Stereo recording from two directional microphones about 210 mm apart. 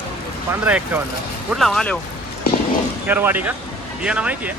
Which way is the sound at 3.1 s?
10° right (ahead or behind).